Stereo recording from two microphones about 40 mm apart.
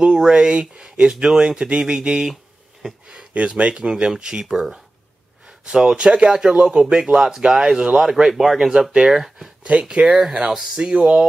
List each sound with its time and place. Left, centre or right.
0.0 s speech: centre
3.7 s speech: centre
5.9 s speech: right
8.3 s speech: centre
8.5 s speech: centre
9.6 s speech: right
10.5 s speech: centre